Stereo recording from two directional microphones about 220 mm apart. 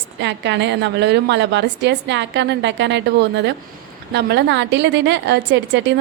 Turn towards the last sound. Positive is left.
turn(degrees=-50)  # may be behind; listen again after turning